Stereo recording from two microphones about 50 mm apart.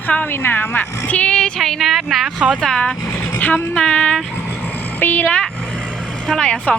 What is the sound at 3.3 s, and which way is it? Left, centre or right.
Speech, left.